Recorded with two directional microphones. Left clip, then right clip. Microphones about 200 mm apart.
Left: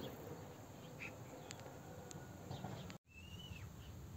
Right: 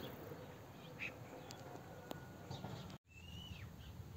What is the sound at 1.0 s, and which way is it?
Insect, 60° left (ahead or behind).